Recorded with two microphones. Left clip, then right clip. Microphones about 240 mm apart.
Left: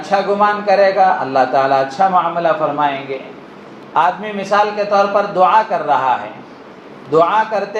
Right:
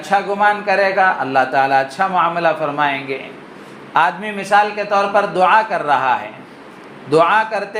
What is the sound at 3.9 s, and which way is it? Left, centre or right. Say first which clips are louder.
Speech: left 1 dB; right.